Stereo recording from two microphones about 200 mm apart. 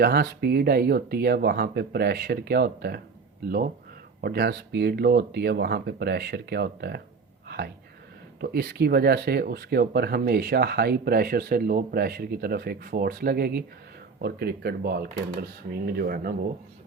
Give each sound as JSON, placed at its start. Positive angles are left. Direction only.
{"t": 0.0, "sound": "speech", "side_deg": -50}
{"t": 4.2, "sound": "speech", "side_deg": -50}
{"t": 7.4, "sound": "a sound", "side_deg": -55}
{"t": 8.4, "sound": "speech", "side_deg": -50}